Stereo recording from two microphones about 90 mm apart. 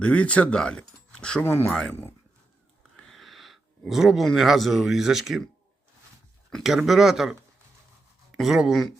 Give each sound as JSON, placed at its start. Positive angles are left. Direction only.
{"t": 0.0, "sound": "speech", "side_deg": 15}
{"t": 1.5, "sound": "speech", "side_deg": 25}
{"t": 1.7, "sound": "speech", "side_deg": 10}
{"t": 6.8, "sound": "speech", "side_deg": -5}
{"t": 8.4, "sound": "speech", "side_deg": -5}